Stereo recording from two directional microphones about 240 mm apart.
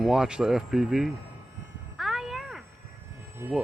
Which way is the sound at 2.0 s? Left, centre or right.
Centre.